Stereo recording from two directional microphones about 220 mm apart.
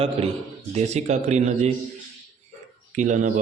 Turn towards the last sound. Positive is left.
turn(degrees=-35)  # may be behind; listen again after turning